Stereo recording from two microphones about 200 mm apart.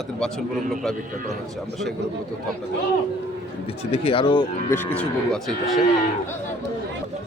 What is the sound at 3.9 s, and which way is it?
Speech, 25° left (ahead or behind).